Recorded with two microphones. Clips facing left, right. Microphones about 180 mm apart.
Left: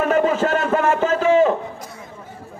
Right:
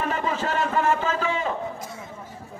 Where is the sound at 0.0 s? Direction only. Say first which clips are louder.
Left 9 dB; 50° left (ahead or behind).